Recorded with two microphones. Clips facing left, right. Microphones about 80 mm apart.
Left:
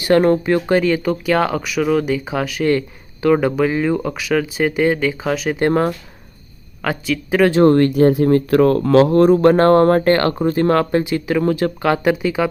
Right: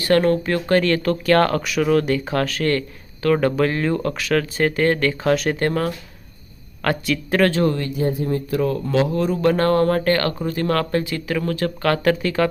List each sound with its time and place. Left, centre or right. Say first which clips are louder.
0.0 s speech: left 3 dB; centre
5.5 s speech: left 5 dB; left
6.8 s speech: left 1 dB; centre
7.6 s speech: left 9 dB; left; by 12.5 s centre